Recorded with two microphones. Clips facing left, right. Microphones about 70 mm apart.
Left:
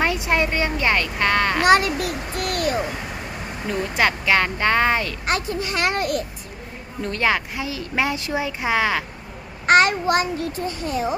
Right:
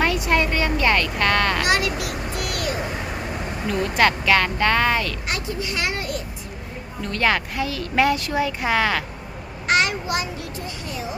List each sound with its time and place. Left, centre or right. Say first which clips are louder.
0.0 s a sound: even; left
1.6 s a sound: left 5 dB; left
3.7 s speech: right 2 dB; centre
5.2 s a child's voice: left 4 dB; left
7.2 s speech: right 1 dB; centre
9.6 s child singing: left 5 dB; left
10.8 s speech: left 8 dB; left